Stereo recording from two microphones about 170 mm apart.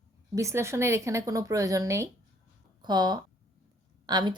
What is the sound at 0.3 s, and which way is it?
Speech, 15° right (ahead or behind).